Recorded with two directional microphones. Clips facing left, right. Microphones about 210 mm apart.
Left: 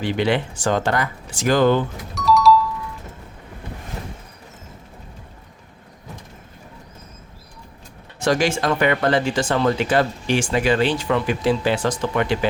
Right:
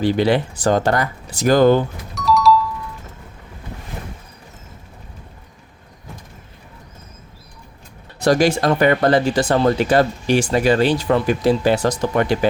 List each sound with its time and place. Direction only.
0.0 s speech: 35° right (ahead or behind)
2.1 s music: centre (ahead or behind)
8.2 s speech: 40° right (ahead or behind)